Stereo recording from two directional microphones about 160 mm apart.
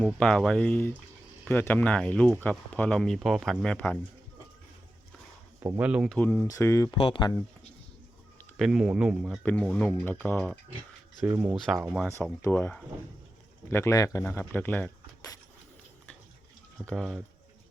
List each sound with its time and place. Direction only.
0.0 s speech: 5° left (ahead or behind)
5.5 s speech: 20° right (ahead or behind)
5.8 s speech: 5° right (ahead or behind)
6.1 s speech: 10° left (ahead or behind)
6.9 s speech: 30° left (ahead or behind)
8.5 s speech: centre (ahead or behind)
9.4 s speech: 10° left (ahead or behind)
11.3 s speech: 10° right (ahead or behind)
12.4 s speech: 15° left (ahead or behind)
16.8 s speech: centre (ahead or behind)